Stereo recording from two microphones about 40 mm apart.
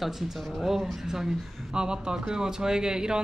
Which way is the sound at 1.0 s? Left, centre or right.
Centre.